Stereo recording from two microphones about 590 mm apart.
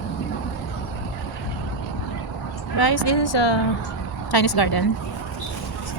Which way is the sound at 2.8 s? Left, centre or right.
Left.